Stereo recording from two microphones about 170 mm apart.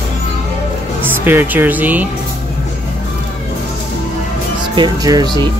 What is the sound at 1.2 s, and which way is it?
Speech, 10° right (ahead or behind).